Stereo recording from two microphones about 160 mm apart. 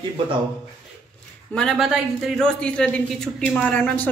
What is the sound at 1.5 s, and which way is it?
A man's voice, centre (ahead or behind).